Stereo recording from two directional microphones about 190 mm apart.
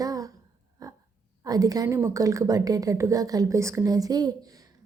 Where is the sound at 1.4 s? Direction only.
20° right (ahead or behind).